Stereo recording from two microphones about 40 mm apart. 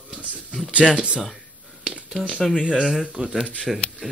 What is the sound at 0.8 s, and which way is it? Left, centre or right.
Speech, right.